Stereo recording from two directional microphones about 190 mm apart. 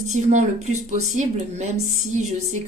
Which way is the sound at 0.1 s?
40° right (ahead or behind).